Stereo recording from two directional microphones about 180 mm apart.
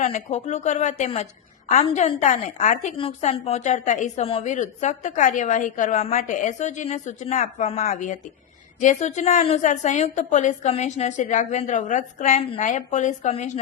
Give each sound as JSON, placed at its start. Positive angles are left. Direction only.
{"t": 0.0, "sound": "a woman's voice", "side_deg": 35}
{"t": 3.0, "sound": "a woman's voice", "side_deg": 30}